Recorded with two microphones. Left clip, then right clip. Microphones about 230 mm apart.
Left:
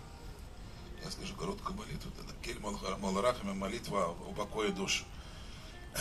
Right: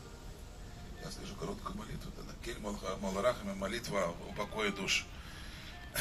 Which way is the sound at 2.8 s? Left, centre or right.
Left.